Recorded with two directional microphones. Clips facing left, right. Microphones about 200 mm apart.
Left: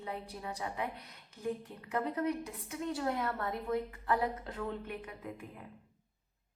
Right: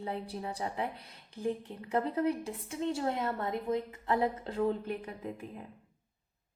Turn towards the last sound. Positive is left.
turn(degrees=-30)  # may be behind; listen again after turning